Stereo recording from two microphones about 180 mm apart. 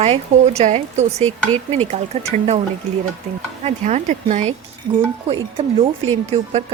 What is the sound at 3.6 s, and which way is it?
Speech, 40° right (ahead or behind).